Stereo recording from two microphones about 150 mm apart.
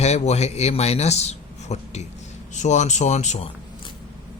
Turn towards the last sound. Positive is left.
turn(degrees=50)  # may be behind; listen again after turning